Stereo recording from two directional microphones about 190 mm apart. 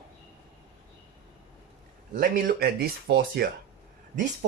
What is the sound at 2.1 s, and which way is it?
Speech, 55° right (ahead or behind).